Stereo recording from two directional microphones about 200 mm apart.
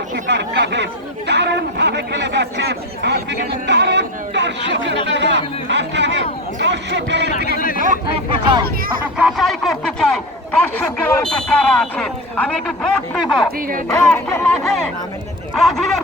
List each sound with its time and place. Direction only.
0.3 s speech: 60° right (ahead or behind)
1.3 s a sound: 60° right (ahead or behind)
5.0 s chatter: 60° right (ahead or behind)
5.6 s a sound: 60° right (ahead or behind)
6.6 s speech: 60° right (ahead or behind)
8.3 s speech: 25° right (ahead or behind)
9.1 s speech: centre (ahead or behind)
13.6 s speech: 45° right (ahead or behind)
13.8 s speech: 10° left (ahead or behind)